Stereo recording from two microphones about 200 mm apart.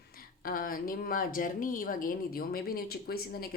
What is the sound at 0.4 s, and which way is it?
Speech, 45° left (ahead or behind).